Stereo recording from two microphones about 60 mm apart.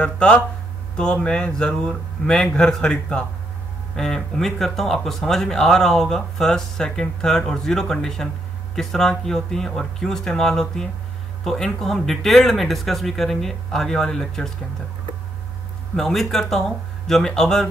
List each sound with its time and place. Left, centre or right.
0.0 s speech: centre
16.0 s speech: centre